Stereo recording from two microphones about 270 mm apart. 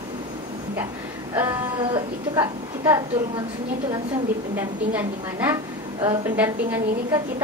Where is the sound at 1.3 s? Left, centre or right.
Centre.